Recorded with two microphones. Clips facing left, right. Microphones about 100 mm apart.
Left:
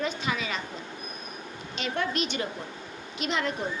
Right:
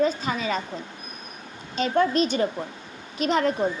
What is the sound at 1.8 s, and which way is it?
A woman's voice, 35° right (ahead or behind).